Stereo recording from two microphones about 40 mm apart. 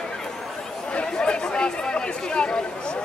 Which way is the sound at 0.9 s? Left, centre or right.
Left.